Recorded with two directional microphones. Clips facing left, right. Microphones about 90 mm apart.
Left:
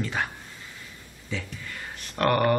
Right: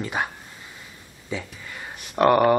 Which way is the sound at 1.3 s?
15° right (ahead or behind).